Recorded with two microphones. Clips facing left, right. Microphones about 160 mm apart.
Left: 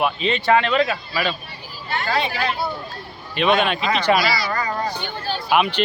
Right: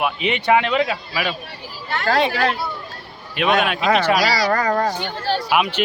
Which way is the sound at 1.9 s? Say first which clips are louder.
Right 4 dB; 90° right.